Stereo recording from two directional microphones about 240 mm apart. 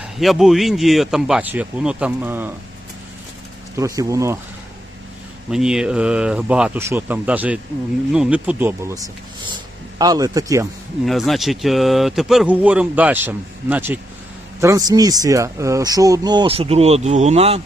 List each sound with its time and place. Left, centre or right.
0.0 s speech: centre
3.8 s speech: centre
5.5 s speech: centre
10.0 s speech: centre
11.0 s speech: centre; by 17.6 s right